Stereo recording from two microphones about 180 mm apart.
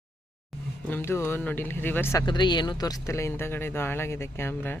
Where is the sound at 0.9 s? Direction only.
10° left (ahead or behind).